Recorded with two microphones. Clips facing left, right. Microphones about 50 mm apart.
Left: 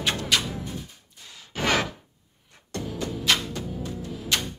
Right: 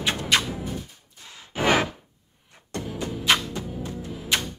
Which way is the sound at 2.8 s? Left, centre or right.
Right.